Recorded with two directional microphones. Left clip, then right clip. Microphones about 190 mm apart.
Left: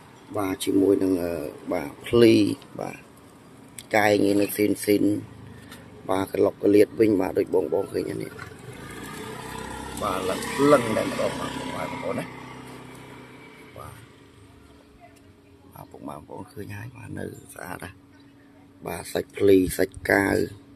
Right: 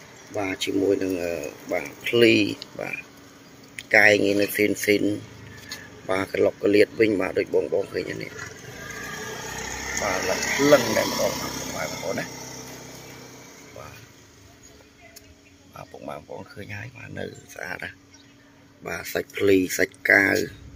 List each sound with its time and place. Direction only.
0.3 s speech: 15° left (ahead or behind)
10.0 s speech: 10° right (ahead or behind)
11.4 s speech: 65° right (ahead or behind)
12.0 s speech: 5° left (ahead or behind)
15.7 s speech: 10° left (ahead or behind)